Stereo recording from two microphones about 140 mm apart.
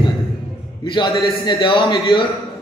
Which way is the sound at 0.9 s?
30° left (ahead or behind).